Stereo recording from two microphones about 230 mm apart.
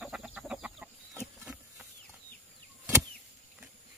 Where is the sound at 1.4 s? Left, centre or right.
Centre.